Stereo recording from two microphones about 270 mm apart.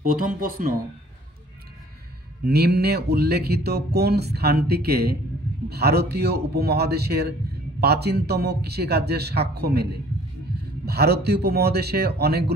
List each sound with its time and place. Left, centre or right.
0.0 s speech: right
2.4 s speech: right
10.9 s speech: right